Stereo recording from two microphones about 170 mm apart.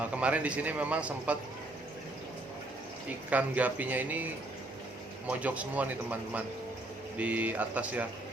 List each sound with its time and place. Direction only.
0.0 s a man's voice: 10° right (ahead or behind)
3.1 s a man's voice: 10° right (ahead or behind)
5.3 s a man's voice: 10° right (ahead or behind)